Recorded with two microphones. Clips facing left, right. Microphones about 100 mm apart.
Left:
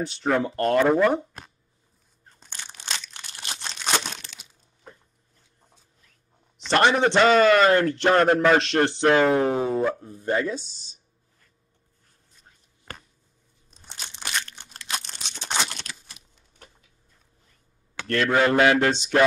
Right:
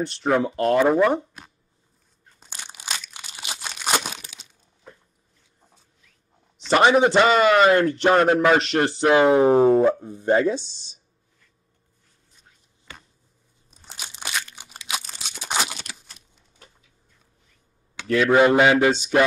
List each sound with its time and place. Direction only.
0.0 s a man's voice: centre (ahead or behind)
2.4 s crumpling: 10° right (ahead or behind)
6.7 s a man's voice: 5° right (ahead or behind)
9.4 s music: 35° right (ahead or behind)
9.8 s speech: 20° right (ahead or behind)
12.9 s a sound: 50° left (ahead or behind)
13.7 s crunch: 5° right (ahead or behind)
18.0 s a man's voice: 5° right (ahead or behind)
18.4 s mantra: 15° right (ahead or behind)